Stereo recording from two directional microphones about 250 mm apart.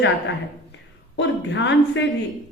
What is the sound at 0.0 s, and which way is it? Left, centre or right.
A woman's voice, left.